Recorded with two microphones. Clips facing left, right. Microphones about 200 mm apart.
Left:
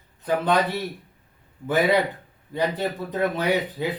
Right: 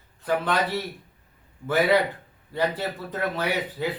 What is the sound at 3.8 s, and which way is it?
Speech, 15° left (ahead or behind).